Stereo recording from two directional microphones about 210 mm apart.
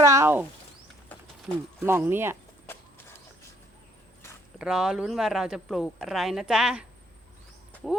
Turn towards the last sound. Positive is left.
turn(degrees=0)  # may be behind; listen again after turning